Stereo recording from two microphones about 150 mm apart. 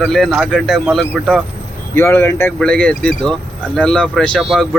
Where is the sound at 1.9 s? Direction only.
15° left (ahead or behind).